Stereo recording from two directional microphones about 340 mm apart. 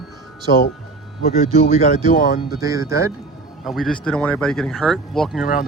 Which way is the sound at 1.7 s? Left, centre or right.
Left.